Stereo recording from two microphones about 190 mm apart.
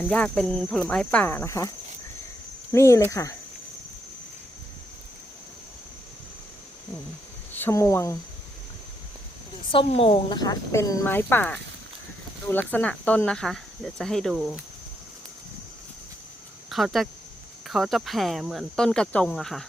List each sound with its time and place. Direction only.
0.0 s speech: 5° left (ahead or behind)
2.7 s speech: 15° left (ahead or behind)
7.5 s speech: 10° left (ahead or behind)
9.7 s speech: 30° left (ahead or behind); by 14.6 s centre (ahead or behind)
16.6 s speech: centre (ahead or behind)